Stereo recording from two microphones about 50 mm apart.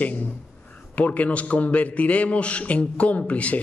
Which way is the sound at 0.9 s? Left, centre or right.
Left.